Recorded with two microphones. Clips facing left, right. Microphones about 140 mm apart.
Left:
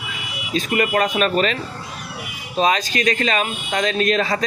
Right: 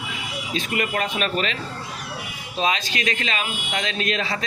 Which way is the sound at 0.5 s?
45° left (ahead or behind).